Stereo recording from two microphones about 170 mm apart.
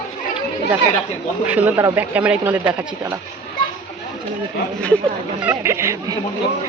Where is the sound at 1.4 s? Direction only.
10° right (ahead or behind).